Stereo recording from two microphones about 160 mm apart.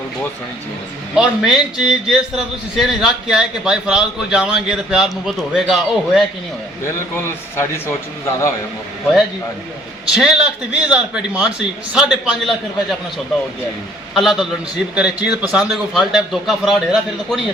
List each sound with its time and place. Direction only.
1.1 s a man's voice: 5° right (ahead or behind)
7.5 s speech: 15° left (ahead or behind)
10.2 s a man's voice: 5° right (ahead or behind)
14.1 s a man's voice: centre (ahead or behind)